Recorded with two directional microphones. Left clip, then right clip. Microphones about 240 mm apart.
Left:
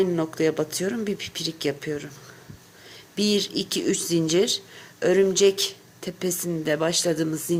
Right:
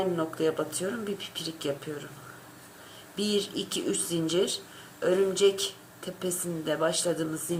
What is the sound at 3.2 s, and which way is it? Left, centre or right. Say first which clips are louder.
Speech: left 5 dB; left.